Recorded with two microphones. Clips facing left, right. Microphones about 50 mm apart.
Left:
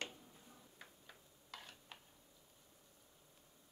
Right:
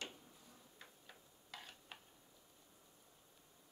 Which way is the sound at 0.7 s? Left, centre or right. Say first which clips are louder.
Right 1 dB; centre.